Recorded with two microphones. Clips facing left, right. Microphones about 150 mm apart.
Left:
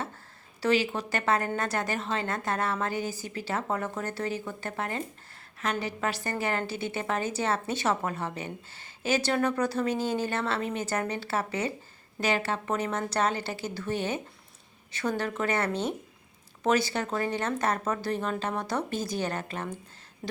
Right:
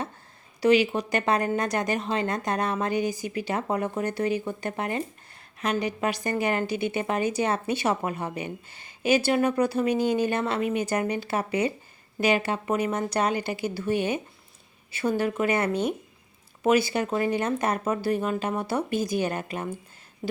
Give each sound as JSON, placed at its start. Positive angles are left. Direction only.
{"t": 0.6, "sound": "a woman's voice", "side_deg": -15}